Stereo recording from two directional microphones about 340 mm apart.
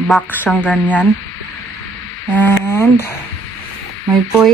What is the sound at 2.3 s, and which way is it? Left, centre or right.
Speech, centre.